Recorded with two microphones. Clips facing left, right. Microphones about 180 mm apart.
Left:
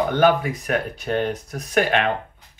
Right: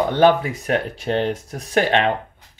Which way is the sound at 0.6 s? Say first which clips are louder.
Right 2 dB; 25° right (ahead or behind).